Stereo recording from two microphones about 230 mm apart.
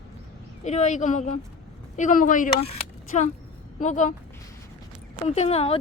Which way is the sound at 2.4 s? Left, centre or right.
Left.